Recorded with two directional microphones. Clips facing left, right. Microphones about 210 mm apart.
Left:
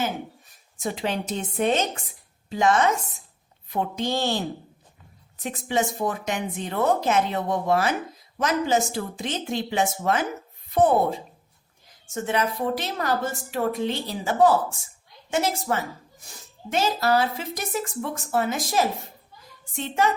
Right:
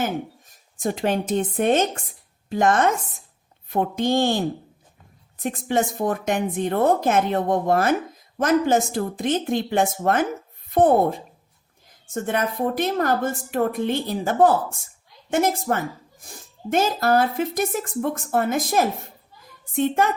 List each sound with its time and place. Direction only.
0.0 s a woman's voice: 45° right (ahead or behind)